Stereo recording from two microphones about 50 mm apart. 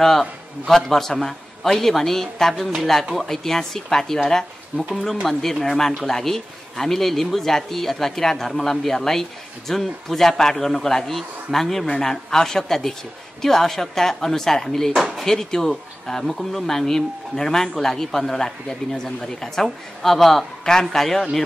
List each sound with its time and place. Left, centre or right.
0.7 s speech: centre
4.7 s speech: right
5.2 s a man's voice: centre